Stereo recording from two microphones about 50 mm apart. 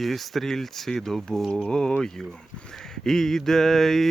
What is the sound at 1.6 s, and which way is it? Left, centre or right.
Mantra, centre.